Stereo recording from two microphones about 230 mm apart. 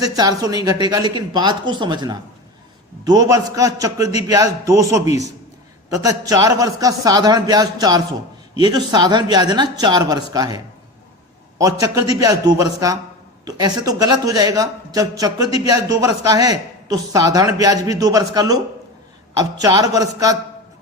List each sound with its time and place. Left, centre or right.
0.0 s a man's voice: centre
5.9 s a man's voice: centre